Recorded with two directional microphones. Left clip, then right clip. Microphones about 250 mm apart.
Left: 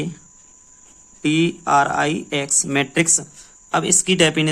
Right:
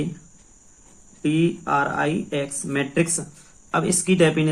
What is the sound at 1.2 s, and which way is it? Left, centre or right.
Speech, left.